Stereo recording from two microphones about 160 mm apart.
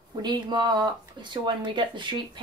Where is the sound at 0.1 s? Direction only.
25° right (ahead or behind).